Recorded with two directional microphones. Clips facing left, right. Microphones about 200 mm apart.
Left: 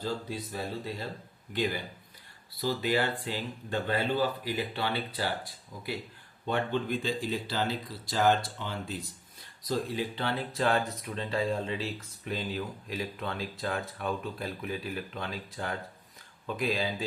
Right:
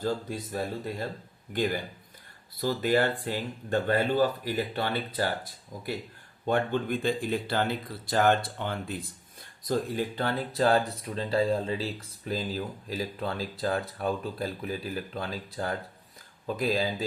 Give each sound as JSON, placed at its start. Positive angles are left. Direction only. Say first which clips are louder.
{"t": 0.0, "sound": "speech", "louder": "right 4 dB", "side_deg": -50}
{"t": 2.6, "sound": "speech", "louder": "right 3 dB", "side_deg": -50}